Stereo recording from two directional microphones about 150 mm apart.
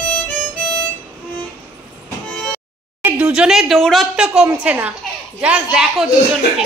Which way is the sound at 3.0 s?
10° right (ahead or behind).